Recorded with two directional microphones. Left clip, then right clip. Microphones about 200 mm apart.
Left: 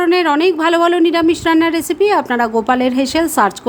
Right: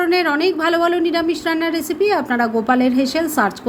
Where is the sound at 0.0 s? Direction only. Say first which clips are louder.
Left 4 dB; 15° left (ahead or behind).